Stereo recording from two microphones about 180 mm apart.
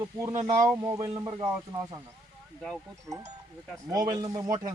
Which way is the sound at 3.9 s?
20° right (ahead or behind).